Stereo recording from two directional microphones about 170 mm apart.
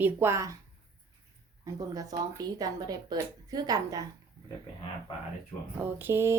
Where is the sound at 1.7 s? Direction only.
20° right (ahead or behind).